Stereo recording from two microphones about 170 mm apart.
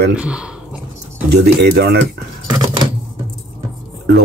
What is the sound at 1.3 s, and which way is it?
Speech, 70° right (ahead or behind).